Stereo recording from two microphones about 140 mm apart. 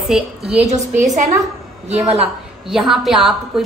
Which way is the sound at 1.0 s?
60° right (ahead or behind).